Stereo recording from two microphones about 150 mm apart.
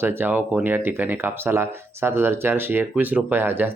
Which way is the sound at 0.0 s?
15° right (ahead or behind).